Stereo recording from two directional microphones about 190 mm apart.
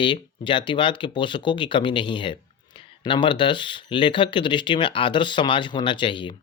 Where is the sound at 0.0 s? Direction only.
25° left (ahead or behind).